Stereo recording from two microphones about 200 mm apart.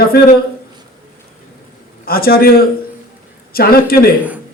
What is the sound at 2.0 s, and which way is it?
Speech, 50° left (ahead or behind).